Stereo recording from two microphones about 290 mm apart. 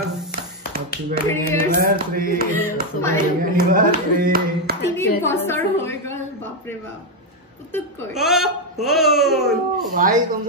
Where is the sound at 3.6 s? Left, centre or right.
Right.